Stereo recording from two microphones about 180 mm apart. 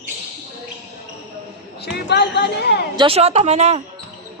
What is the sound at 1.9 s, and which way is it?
Speech, 65° left (ahead or behind).